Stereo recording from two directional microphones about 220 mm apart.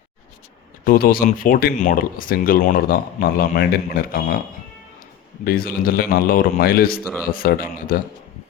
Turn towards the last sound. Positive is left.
turn(degrees=40)  # may be behind; listen again after turning